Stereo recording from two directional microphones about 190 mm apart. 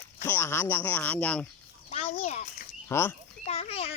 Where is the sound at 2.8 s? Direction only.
15° left (ahead or behind).